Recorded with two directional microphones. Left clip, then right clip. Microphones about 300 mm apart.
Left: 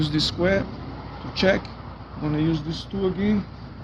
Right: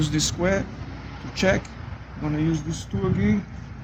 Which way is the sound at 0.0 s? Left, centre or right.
Centre.